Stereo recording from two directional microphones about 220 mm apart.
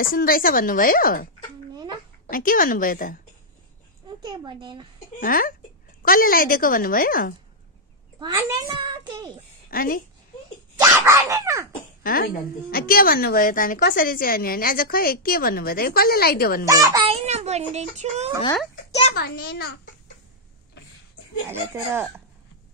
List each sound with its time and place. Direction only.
0.0 s a woman's voice: 40° left (ahead or behind)
4.2 s speech: 20° right (ahead or behind)
5.2 s a woman's voice: 40° left (ahead or behind)
8.8 s a child's voice: 20° right (ahead or behind)
9.7 s a woman's voice: 40° left (ahead or behind)
10.8 s speech: 15° right (ahead or behind)
12.0 s a woman's voice: 40° left (ahead or behind)
16.6 s speech: 15° right (ahead or behind)
17.3 s speech: 30° right (ahead or behind)
19.1 s a child's voice: 45° left (ahead or behind)
21.5 s speech: 10° right (ahead or behind)